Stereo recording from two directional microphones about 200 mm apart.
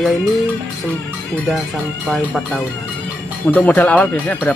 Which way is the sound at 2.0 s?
Centre (ahead or behind).